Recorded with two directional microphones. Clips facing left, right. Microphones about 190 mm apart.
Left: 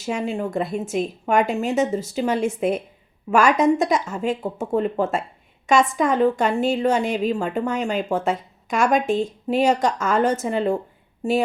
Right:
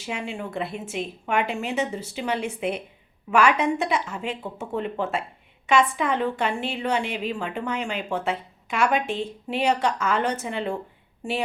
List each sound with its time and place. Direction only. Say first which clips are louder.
0.0 s a woman's voice: left 7 dB; 40° left (ahead or behind)